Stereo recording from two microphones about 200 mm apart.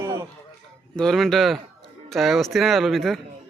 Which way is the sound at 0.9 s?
Centre (ahead or behind).